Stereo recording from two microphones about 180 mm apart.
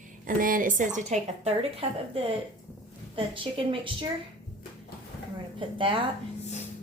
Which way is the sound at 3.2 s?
30° right (ahead or behind).